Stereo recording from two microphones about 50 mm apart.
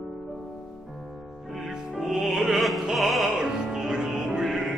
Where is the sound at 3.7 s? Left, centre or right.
Centre.